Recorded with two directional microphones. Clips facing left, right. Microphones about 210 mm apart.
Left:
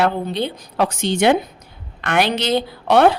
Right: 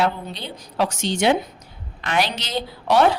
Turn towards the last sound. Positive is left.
turn(degrees=60)  # may be behind; listen again after turning